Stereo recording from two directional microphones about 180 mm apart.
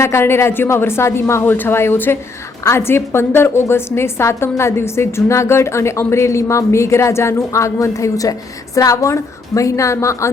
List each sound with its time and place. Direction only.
0.0 s a woman's voice: 15° left (ahead or behind)